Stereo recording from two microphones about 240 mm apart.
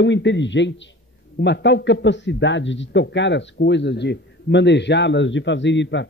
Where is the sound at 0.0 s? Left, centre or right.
Left.